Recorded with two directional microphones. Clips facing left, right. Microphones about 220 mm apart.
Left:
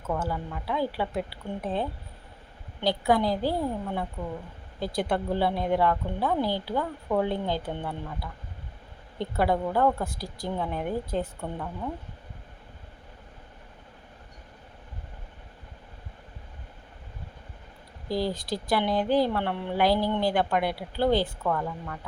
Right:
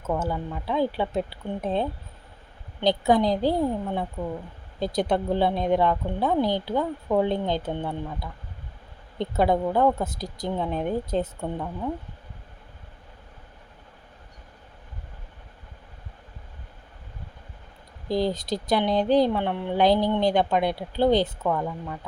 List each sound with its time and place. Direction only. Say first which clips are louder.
0.1 s speech: right 3 dB; 20° right (ahead or behind)
18.1 s speech: right 3 dB; 20° right (ahead or behind)